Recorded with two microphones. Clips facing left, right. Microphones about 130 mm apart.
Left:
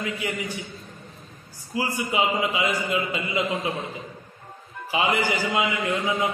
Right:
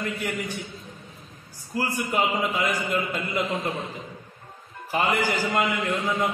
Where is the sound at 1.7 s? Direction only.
5° left (ahead or behind).